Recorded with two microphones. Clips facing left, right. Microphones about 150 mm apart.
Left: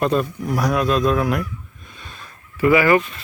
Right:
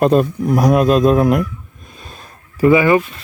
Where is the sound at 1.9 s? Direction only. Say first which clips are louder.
Right 3 dB; 40° right (ahead or behind).